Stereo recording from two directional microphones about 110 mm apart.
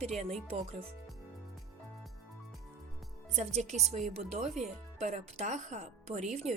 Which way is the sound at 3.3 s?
90° right.